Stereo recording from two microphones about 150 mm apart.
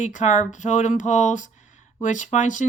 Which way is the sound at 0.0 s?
55° left (ahead or behind).